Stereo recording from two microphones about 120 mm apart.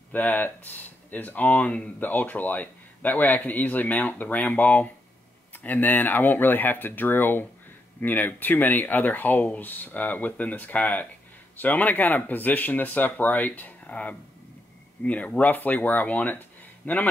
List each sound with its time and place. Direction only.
0.1 s speech: 15° left (ahead or behind)